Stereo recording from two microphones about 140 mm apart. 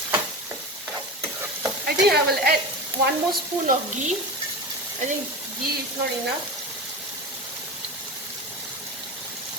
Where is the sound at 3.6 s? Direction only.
65° right (ahead or behind).